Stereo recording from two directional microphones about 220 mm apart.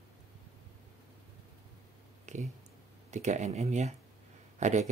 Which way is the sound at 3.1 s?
30° right (ahead or behind).